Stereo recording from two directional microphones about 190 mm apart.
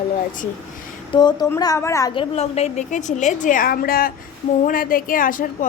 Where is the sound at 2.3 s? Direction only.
35° left (ahead or behind).